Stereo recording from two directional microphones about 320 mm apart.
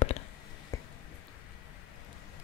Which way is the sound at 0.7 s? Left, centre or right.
Centre.